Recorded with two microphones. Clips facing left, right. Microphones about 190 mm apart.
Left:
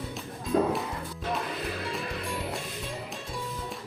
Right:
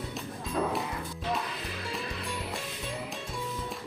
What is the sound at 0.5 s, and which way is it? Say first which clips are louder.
Music: left 6 dB; 40° left (ahead or behind).